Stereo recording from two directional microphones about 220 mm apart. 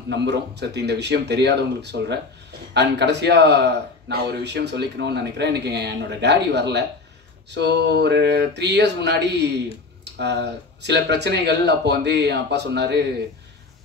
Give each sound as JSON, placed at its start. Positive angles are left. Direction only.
{"t": 0.1, "sound": "a man's voice", "side_deg": -50}